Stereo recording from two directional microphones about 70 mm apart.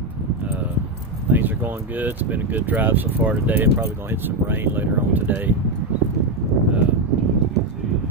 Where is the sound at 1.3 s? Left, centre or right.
Right.